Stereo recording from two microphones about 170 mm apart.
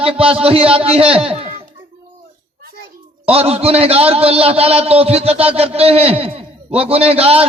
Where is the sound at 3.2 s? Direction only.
35° right (ahead or behind).